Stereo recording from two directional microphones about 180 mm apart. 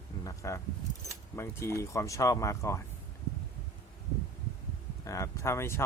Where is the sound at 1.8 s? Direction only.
15° left (ahead or behind).